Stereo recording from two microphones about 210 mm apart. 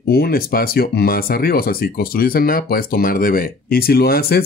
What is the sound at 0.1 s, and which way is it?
Speech, 45° left (ahead or behind).